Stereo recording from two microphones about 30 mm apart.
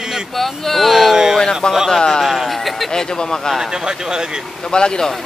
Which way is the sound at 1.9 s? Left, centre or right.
Left.